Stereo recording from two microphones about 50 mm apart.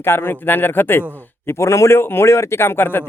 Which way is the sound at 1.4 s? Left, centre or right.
Left.